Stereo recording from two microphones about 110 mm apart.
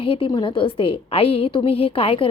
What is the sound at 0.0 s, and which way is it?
A woman's voice, 55° left (ahead or behind).